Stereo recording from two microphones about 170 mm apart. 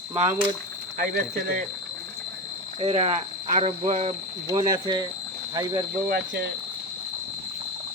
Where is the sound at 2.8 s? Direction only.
35° right (ahead or behind).